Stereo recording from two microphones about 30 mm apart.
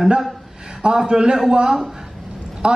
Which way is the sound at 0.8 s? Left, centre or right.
Right.